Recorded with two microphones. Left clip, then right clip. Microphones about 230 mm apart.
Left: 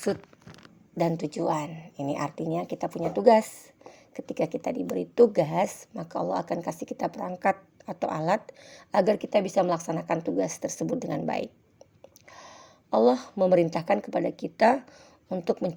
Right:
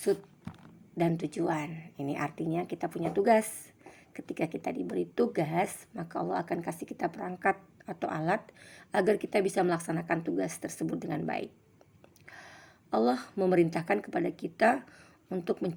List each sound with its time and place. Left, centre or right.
0.9 s a woman's voice: left